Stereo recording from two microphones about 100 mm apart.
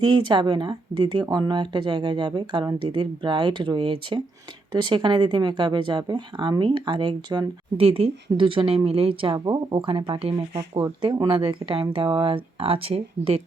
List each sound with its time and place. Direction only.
0.0 s speech: 50° right (ahead or behind)
7.8 s speech: 70° right (ahead or behind)